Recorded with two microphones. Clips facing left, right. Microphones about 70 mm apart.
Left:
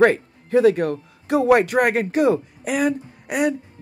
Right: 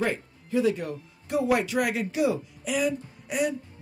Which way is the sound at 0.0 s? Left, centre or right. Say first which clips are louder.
Left 12 dB; left.